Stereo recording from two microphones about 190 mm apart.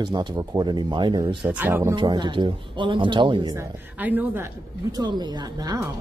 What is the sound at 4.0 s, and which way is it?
Speech, 10° right (ahead or behind).